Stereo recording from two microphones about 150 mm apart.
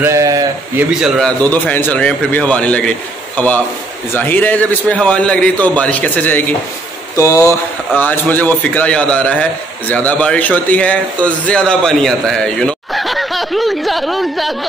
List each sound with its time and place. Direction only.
0.0 s a sound: 20° right (ahead or behind)
0.7 s a man's voice: 5° right (ahead or behind)
1.5 s speech: 10° left (ahead or behind)